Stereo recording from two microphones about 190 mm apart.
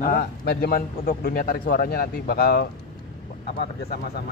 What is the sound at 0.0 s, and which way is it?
A man's voice, 50° left (ahead or behind).